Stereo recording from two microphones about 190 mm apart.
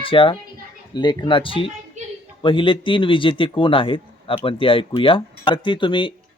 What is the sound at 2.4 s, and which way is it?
Speech, 25° left (ahead or behind).